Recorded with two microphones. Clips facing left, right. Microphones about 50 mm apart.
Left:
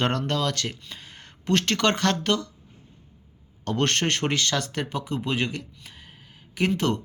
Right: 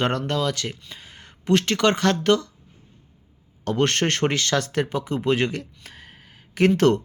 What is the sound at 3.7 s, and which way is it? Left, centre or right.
Speech, right.